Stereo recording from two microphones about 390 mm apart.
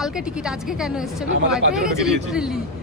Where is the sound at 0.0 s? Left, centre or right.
Centre.